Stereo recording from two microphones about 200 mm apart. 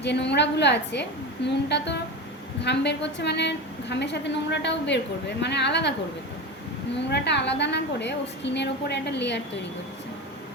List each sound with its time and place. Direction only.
0.0 s a woman's voice: 60° left (ahead or behind)
7.1 s a woman's voice: 60° left (ahead or behind)